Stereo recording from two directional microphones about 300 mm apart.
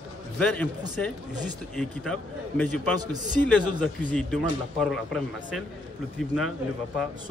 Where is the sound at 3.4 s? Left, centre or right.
Centre.